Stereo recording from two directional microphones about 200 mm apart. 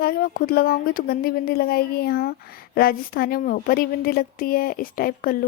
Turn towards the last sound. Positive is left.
turn(degrees=45)  # may be behind; listen again after turning